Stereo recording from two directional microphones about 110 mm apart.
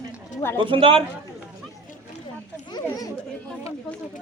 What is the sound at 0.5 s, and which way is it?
Speech, 50° right (ahead or behind).